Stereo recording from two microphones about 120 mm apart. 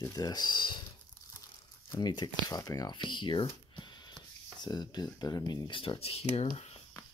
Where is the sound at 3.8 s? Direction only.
40° left (ahead or behind).